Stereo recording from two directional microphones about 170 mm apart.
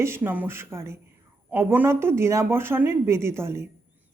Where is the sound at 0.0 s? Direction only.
15° right (ahead or behind).